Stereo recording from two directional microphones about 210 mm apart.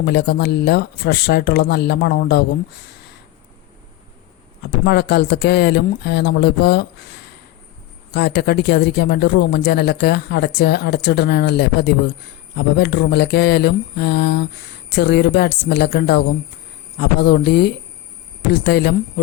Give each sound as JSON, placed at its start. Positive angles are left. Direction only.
{"t": 0.0, "sound": "speech", "side_deg": 50}
{"t": 4.9, "sound": "speech", "side_deg": 50}
{"t": 8.1, "sound": "speech", "side_deg": 50}